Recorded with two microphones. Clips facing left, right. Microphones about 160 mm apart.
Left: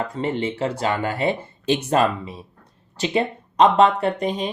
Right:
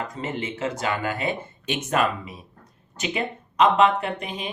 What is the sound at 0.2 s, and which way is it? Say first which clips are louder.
Speech: left 6 dB; 35° left (ahead or behind).